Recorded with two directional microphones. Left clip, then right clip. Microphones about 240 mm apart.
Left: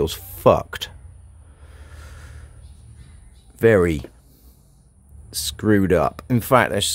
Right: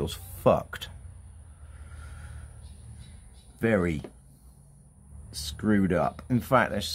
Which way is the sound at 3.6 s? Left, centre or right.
Left.